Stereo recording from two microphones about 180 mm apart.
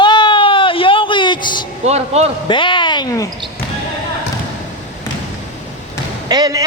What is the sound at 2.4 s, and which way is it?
Speech, 25° left (ahead or behind).